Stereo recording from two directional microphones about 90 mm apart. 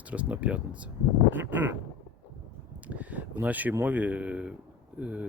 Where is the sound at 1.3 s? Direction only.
20° right (ahead or behind).